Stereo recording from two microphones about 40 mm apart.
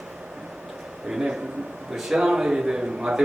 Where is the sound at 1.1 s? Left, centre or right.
Centre.